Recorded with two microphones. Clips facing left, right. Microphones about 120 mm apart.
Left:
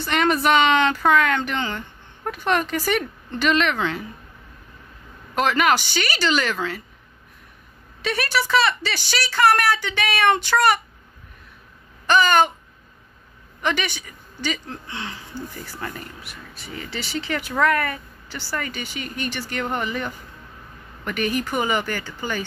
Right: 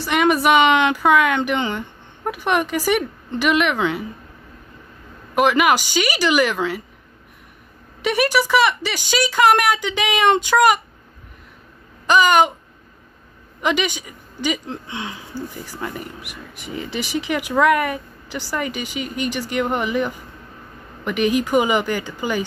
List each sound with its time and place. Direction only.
0.0 s speech: 10° right (ahead or behind)
5.3 s speech: 10° right (ahead or behind)
8.0 s speech: 15° right (ahead or behind)
12.1 s speech: 15° right (ahead or behind)
13.6 s speech: 15° right (ahead or behind)